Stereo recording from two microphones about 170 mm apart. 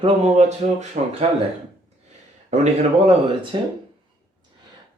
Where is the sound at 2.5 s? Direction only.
40° right (ahead or behind).